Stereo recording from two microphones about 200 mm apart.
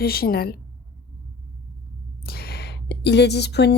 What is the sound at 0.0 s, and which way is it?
Speech, 50° left (ahead or behind).